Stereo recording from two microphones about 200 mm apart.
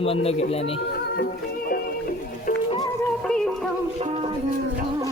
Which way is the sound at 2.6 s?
20° left (ahead or behind).